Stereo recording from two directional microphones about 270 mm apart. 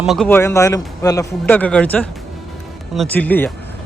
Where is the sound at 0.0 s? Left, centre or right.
Centre.